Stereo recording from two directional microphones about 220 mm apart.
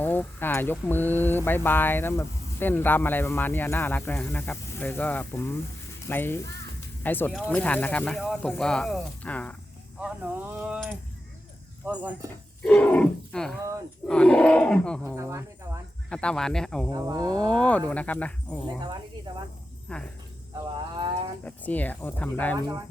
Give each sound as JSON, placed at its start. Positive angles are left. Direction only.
{"t": 0.0, "sound": "speech", "side_deg": 10}
{"t": 10.0, "sound": "speech", "side_deg": -5}
{"t": 12.6, "sound": "speech", "side_deg": 5}
{"t": 15.0, "sound": "speech", "side_deg": -15}
{"t": 16.0, "sound": "speech", "side_deg": 5}
{"t": 16.9, "sound": "speech", "side_deg": -15}
{"t": 17.4, "sound": "speech", "side_deg": 5}
{"t": 19.9, "sound": "speech", "side_deg": 5}
{"t": 21.4, "sound": "speech", "side_deg": 5}